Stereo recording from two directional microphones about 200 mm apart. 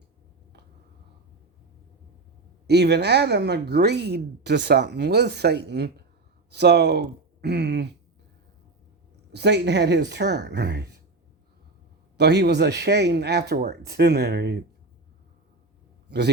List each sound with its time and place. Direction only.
2.6 s speech: 55° right (ahead or behind)
9.3 s speech: 60° right (ahead or behind)
12.1 s speech: 55° right (ahead or behind)
16.0 s a man's voice: 55° right (ahead or behind)